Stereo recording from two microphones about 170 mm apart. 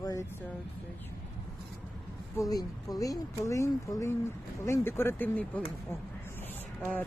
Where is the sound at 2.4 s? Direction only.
20° left (ahead or behind).